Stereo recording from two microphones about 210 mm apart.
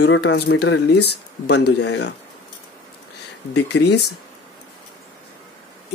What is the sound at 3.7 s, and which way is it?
Speech, 55° left (ahead or behind).